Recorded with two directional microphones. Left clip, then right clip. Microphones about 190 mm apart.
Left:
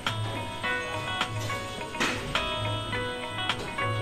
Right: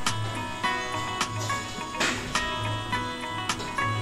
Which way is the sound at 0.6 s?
25° right (ahead or behind).